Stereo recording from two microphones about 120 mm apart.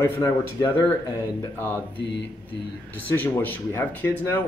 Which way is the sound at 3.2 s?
15° left (ahead or behind).